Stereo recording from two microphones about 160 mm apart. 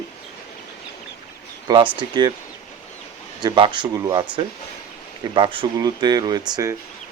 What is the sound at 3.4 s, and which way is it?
Speech, 30° right (ahead or behind).